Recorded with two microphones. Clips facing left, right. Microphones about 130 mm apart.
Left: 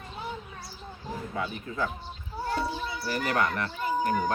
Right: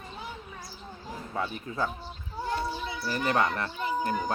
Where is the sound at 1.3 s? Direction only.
35° right (ahead or behind).